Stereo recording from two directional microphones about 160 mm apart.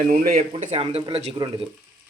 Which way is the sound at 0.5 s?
40° right (ahead or behind).